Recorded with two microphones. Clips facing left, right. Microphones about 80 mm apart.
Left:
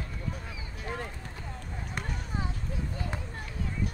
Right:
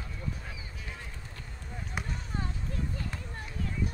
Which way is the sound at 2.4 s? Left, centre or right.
Centre.